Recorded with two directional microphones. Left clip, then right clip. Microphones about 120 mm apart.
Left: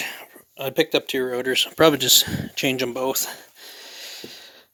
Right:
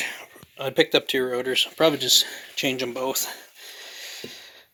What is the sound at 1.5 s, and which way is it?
Speech, 65° left (ahead or behind).